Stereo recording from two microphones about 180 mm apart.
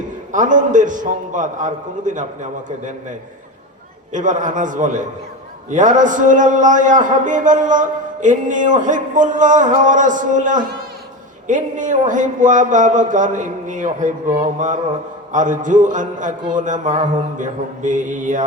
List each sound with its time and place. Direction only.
0.3 s a man's voice: 45° right (ahead or behind)
4.1 s a man's voice: 45° right (ahead or behind)
15.3 s a man's voice: 45° right (ahead or behind)